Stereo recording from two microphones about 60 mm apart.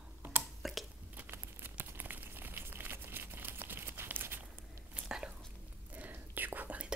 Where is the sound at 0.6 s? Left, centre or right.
Centre.